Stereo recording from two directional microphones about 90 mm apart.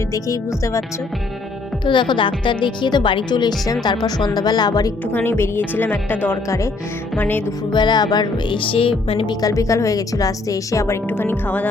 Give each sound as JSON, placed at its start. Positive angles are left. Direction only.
{"t": 0.1, "sound": "speech", "side_deg": 35}
{"t": 1.8, "sound": "speech", "side_deg": 60}
{"t": 3.8, "sound": "music", "side_deg": 50}
{"t": 5.1, "sound": "a woman's voice", "side_deg": 25}
{"t": 7.2, "sound": "music", "side_deg": 20}
{"t": 7.7, "sound": "music", "side_deg": 55}
{"t": 8.5, "sound": "music", "side_deg": 85}
{"t": 9.2, "sound": "speech", "side_deg": 40}
{"t": 11.1, "sound": "a woman's voice", "side_deg": 20}